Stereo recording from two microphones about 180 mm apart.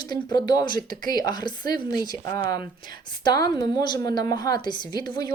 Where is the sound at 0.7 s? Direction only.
50° right (ahead or behind).